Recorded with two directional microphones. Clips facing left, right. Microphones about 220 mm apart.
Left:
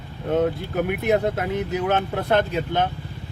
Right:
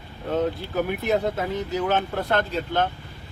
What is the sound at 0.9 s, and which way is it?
Speech, 15° left (ahead or behind).